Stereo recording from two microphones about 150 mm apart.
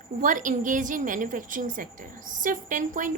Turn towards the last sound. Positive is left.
turn(degrees=-60)  # may be behind; listen again after turning